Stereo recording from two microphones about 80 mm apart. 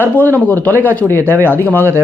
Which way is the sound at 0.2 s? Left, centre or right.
Left.